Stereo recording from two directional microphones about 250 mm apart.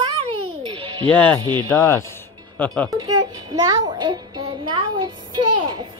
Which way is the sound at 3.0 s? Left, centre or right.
Centre.